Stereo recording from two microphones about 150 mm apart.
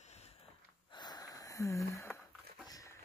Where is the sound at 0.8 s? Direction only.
30° left (ahead or behind).